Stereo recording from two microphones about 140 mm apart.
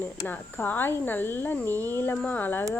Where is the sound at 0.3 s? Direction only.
10° left (ahead or behind).